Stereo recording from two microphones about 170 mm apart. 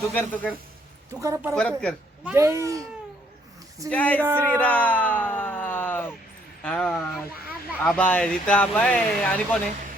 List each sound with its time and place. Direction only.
0.1 s speech: 10° left (ahead or behind)
1.2 s a child's voice: 15° right (ahead or behind)
1.5 s speech: 5° left (ahead or behind)
2.2 s a child's voice: 15° right (ahead or behind)
3.8 s speech: 10° left (ahead or behind)
4.4 s a sound: 10° left (ahead or behind)
6.6 s speech: 5° left (ahead or behind)